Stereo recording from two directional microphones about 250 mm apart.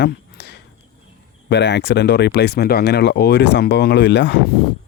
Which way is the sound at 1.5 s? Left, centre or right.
Left.